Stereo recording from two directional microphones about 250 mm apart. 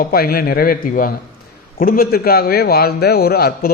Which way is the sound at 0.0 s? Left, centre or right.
Left.